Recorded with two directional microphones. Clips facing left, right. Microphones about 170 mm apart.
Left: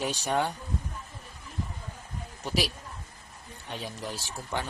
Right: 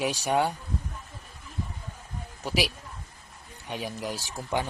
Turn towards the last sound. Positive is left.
turn(degrees=-15)  # may be behind; listen again after turning